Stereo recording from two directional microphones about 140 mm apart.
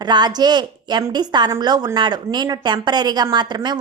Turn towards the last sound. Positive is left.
turn(degrees=-30)  # may be behind; listen again after turning